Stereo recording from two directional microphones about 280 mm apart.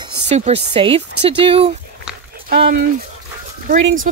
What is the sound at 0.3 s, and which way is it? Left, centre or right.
Speech, right.